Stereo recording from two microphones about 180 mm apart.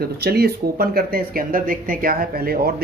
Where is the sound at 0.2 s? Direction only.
60° right (ahead or behind).